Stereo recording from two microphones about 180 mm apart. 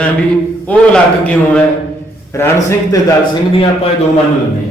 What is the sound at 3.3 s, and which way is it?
Speech, 30° left (ahead or behind).